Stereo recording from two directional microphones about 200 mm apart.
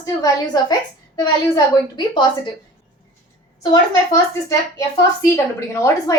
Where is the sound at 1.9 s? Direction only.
25° left (ahead or behind).